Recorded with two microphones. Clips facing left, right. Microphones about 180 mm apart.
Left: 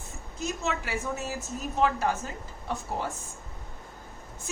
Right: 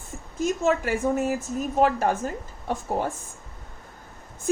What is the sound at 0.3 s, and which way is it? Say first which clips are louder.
Speech: right 9 dB; 50° right (ahead or behind).